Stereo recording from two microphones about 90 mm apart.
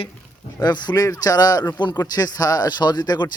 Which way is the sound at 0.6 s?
55° left (ahead or behind).